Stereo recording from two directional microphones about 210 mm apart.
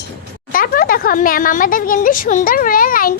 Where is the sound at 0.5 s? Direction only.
45° left (ahead or behind).